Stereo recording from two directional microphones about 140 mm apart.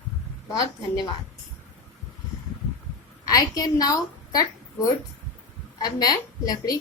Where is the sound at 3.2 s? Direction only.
25° left (ahead or behind).